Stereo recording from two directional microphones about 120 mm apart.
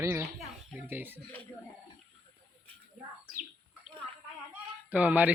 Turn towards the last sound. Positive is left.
turn(degrees=-15)  # may be behind; listen again after turning